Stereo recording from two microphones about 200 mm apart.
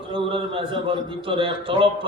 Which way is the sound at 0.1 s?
25° right (ahead or behind).